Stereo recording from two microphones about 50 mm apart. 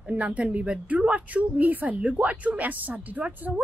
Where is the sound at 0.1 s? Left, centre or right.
Right.